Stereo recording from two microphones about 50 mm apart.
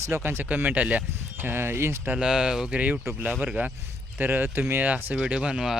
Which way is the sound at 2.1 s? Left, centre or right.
Centre.